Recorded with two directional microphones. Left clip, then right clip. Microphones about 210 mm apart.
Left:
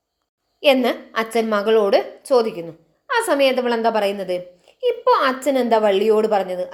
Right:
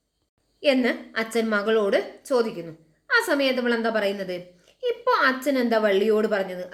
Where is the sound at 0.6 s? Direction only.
10° left (ahead or behind).